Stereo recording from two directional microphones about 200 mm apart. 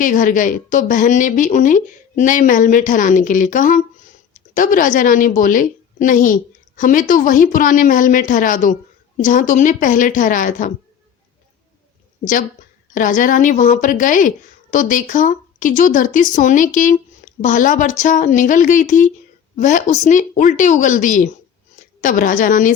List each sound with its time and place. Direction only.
0.0 s a woman's voice: 40° left (ahead or behind)
12.9 s a woman's voice: 40° left (ahead or behind)